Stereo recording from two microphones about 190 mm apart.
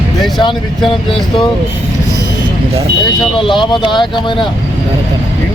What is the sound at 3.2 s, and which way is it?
Speech, 25° left (ahead or behind).